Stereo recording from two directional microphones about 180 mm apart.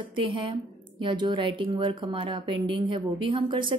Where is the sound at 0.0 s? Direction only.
30° right (ahead or behind).